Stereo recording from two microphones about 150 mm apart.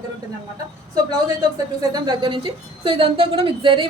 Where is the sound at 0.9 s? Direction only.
25° right (ahead or behind).